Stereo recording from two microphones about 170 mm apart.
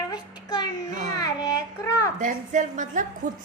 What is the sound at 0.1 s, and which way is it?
Child singing, 25° left (ahead or behind).